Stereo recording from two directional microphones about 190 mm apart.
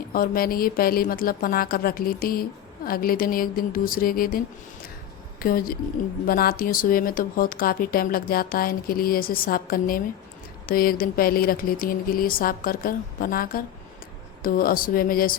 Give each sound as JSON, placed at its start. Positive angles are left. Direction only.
{"t": 0.1, "sound": "a woman's voice", "side_deg": 50}